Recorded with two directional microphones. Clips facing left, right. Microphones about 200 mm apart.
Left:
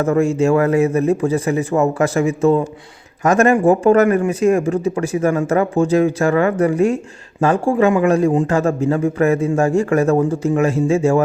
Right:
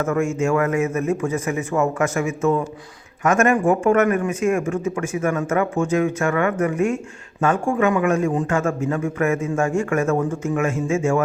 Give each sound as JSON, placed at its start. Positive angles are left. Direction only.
{"t": 0.0, "sound": "a man's voice", "side_deg": 35}